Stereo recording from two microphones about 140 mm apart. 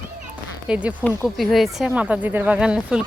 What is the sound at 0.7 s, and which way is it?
Speech, 10° right (ahead or behind).